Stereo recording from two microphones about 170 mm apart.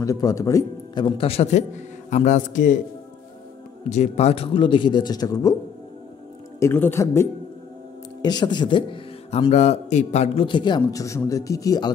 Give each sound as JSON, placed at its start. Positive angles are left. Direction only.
{"t": 0.0, "sound": "a man's voice", "side_deg": 20}
{"t": 3.9, "sound": "speech", "side_deg": 40}
{"t": 6.6, "sound": "speech", "side_deg": 15}